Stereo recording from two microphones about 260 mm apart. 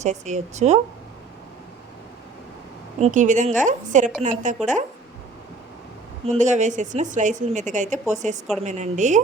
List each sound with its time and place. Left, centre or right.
0.0 s a woman's voice: right
3.0 s a woman's voice: right
6.2 s a woman's voice: right